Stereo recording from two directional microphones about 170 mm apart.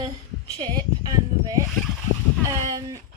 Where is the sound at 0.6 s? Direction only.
25° right (ahead or behind).